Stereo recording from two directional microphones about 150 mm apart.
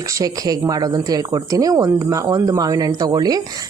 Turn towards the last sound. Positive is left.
turn(degrees=-25)  # may be behind; listen again after turning